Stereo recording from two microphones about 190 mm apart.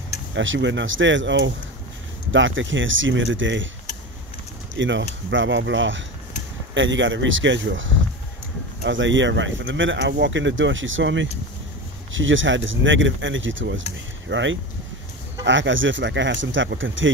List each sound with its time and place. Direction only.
0.3 s speech: 75° right (ahead or behind)
2.3 s speech: 85° right
4.7 s speech: 75° right (ahead or behind)